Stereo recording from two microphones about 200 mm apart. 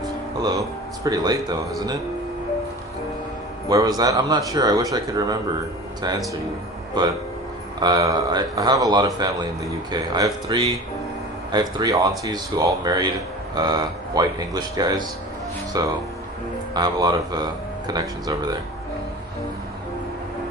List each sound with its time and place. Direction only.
0.3 s speech: 20° right (ahead or behind)
3.7 s speech: 15° right (ahead or behind)
7.0 s speech: 20° right (ahead or behind)